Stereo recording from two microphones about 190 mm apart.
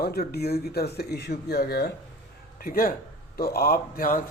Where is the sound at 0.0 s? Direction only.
55° left (ahead or behind).